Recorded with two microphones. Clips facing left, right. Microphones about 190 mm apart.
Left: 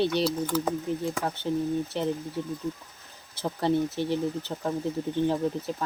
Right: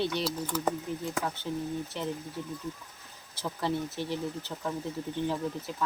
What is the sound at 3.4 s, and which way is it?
Speech, 25° left (ahead or behind).